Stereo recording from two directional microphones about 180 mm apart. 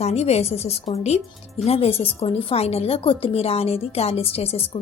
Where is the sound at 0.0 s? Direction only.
35° left (ahead or behind).